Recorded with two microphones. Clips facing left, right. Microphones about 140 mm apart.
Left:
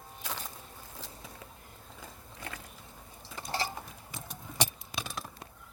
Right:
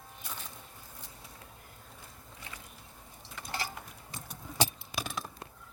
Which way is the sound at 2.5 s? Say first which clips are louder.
Left 6 dB; 50° left (ahead or behind).